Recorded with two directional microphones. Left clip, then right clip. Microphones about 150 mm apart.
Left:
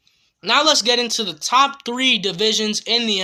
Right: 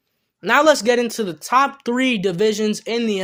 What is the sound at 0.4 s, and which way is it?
Speech, 50° right (ahead or behind).